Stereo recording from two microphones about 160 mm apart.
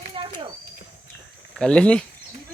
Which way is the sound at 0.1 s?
30° right (ahead or behind).